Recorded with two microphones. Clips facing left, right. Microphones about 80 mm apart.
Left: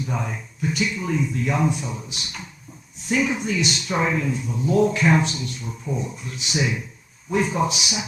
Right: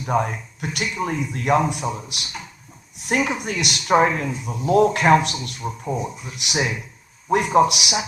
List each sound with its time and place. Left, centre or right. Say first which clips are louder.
0.0 s a man's voice: right 6 dB; right